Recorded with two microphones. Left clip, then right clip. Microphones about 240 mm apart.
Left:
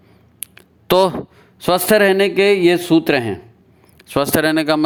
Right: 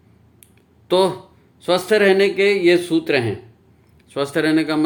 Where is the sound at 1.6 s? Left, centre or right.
Left.